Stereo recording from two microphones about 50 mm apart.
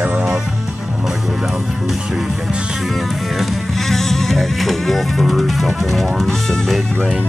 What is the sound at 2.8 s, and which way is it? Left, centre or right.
Music, centre.